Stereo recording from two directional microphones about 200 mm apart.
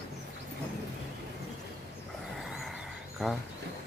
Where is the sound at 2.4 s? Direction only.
Centre (ahead or behind).